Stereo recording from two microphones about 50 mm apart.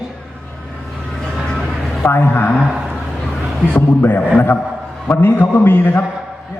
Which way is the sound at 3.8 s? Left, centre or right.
Left.